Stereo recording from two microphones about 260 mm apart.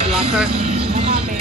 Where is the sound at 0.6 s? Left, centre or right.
Right.